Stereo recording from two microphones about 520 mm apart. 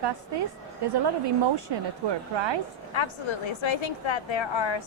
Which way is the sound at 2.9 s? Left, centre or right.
Left.